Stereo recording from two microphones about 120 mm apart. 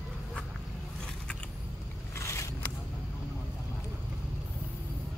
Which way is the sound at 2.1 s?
25° left (ahead or behind).